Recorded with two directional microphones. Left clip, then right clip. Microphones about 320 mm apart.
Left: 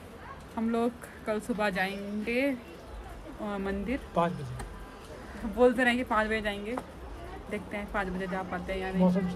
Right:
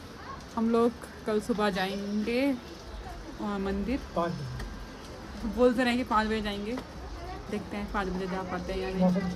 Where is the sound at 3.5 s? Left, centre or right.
Centre.